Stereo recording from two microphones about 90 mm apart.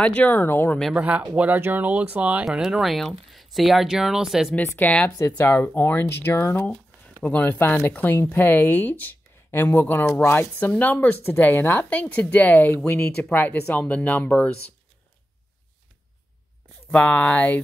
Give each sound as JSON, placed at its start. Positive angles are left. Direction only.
{"t": 0.0, "sound": "speech", "side_deg": 15}
{"t": 0.9, "sound": "speech", "side_deg": -15}
{"t": 2.4, "sound": "speech", "side_deg": -5}
{"t": 4.6, "sound": "speech", "side_deg": 15}
{"t": 16.9, "sound": "speech", "side_deg": 15}